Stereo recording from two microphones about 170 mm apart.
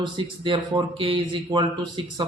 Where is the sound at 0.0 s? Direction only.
30° right (ahead or behind).